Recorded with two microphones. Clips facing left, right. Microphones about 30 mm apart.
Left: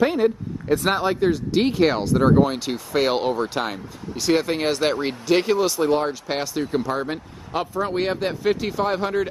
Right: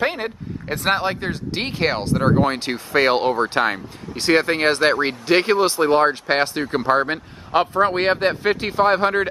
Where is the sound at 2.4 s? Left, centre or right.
Right.